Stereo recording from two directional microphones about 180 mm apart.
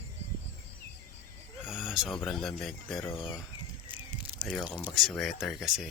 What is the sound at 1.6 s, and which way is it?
Speech, 5° right (ahead or behind).